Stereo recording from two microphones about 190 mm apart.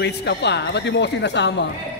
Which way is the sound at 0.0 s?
65° left (ahead or behind).